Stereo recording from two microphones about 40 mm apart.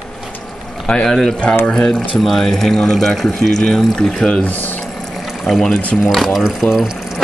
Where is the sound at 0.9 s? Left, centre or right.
Left; by 3.5 s centre.